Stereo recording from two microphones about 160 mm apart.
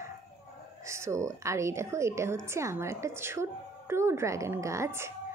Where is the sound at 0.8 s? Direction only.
15° right (ahead or behind).